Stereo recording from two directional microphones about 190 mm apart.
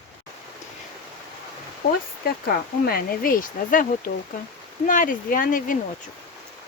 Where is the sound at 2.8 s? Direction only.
50° left (ahead or behind).